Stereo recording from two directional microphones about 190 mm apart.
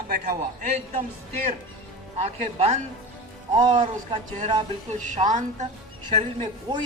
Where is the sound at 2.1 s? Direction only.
35° right (ahead or behind).